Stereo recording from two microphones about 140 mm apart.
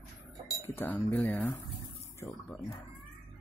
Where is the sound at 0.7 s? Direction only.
15° left (ahead or behind).